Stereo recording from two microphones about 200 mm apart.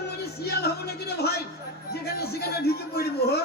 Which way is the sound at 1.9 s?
50° left (ahead or behind).